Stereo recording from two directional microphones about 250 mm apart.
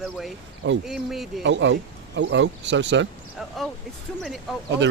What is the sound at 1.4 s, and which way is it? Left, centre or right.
Speech, right.